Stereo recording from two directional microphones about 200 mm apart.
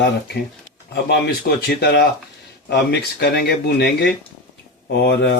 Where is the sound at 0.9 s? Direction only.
60° left (ahead or behind).